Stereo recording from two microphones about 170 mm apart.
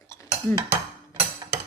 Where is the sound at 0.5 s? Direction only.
25° right (ahead or behind).